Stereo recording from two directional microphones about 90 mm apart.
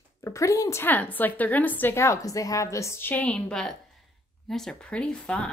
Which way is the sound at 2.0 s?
40° left (ahead or behind).